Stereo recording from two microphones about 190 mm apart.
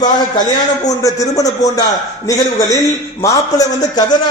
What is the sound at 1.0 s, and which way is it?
A man's voice, 20° left (ahead or behind).